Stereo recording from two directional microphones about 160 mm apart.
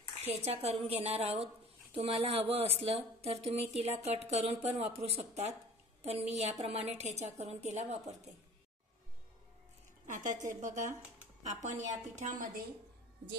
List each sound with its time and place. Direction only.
0.5 s a woman's voice: 40° right (ahead or behind)
10.0 s a woman's voice: 50° right (ahead or behind)